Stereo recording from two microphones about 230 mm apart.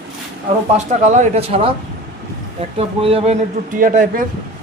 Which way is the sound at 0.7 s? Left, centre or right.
Right.